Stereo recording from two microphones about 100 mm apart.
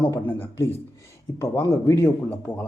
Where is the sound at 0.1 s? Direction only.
25° left (ahead or behind).